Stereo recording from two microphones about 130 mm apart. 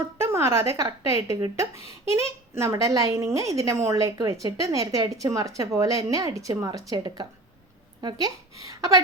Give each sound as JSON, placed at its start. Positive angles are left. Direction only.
{"t": 0.2, "sound": "a woman's voice", "side_deg": -20}